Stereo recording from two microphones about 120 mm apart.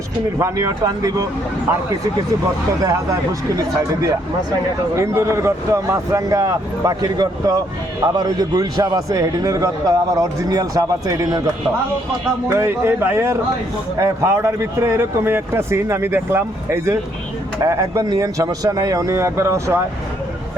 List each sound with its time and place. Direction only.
0.3 s a man's voice: 25° right (ahead or behind)
2.8 s a man's voice: 30° right (ahead or behind)
4.9 s a man's voice: 25° right (ahead or behind)
12.5 s a man's voice: 20° right (ahead or behind)